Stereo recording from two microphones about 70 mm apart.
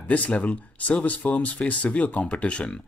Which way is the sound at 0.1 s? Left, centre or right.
Centre.